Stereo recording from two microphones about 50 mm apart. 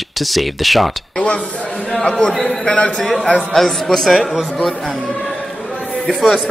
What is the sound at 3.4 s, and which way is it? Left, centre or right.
Speech, centre.